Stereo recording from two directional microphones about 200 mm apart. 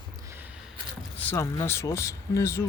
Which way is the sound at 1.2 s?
10° left (ahead or behind).